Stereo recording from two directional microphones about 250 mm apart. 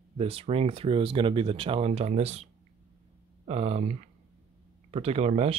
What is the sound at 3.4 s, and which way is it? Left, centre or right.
Speech, right.